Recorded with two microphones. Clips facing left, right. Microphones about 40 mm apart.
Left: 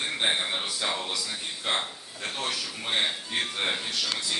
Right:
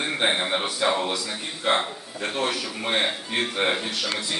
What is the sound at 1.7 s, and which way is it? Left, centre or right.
A man's voice, centre.